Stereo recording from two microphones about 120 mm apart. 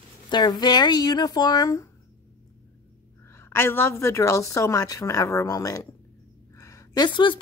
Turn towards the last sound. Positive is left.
turn(degrees=40)  # may be behind; listen again after turning